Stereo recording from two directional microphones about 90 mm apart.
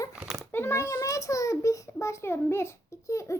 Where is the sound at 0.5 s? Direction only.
30° left (ahead or behind).